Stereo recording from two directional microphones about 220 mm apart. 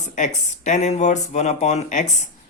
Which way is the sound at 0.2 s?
35° left (ahead or behind).